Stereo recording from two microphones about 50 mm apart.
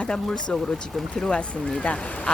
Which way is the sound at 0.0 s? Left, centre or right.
Centre.